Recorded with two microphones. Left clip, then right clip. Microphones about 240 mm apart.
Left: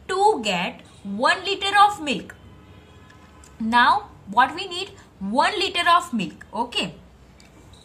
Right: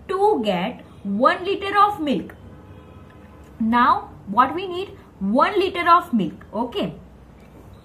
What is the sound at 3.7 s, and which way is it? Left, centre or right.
A woman's voice, centre.